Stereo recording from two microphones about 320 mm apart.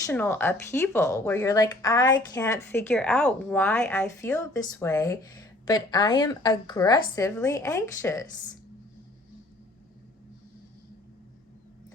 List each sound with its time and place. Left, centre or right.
0.0 s speech: centre